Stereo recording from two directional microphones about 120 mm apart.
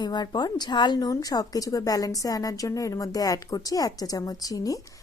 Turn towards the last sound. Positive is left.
turn(degrees=30)  # may be behind; listen again after turning